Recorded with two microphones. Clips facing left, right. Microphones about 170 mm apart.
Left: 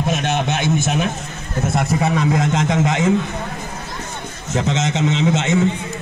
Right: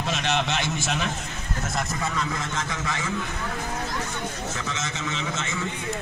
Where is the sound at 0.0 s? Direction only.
50° left (ahead or behind).